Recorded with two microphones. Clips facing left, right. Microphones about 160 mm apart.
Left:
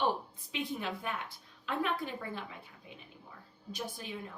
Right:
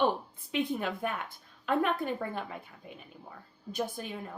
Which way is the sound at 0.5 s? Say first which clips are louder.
Right 6 dB; 50° right (ahead or behind).